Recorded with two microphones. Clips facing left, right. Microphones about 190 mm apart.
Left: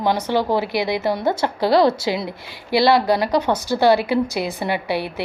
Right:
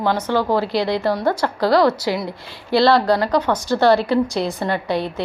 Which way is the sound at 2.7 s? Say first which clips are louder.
Right 1 dB; 15° left (ahead or behind).